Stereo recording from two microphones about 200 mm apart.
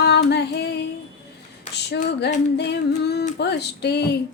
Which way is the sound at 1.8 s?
55° left (ahead or behind).